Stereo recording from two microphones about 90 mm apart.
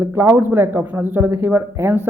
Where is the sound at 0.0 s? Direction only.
30° right (ahead or behind).